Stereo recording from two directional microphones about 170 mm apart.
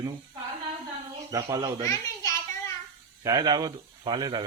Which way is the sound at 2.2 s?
20° left (ahead or behind).